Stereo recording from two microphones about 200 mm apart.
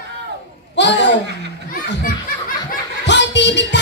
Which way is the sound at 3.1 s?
60° left (ahead or behind).